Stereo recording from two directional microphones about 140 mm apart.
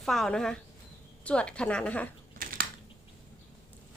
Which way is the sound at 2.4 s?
90° right.